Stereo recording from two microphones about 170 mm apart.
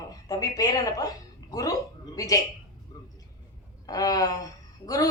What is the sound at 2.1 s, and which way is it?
Speech, 20° left (ahead or behind).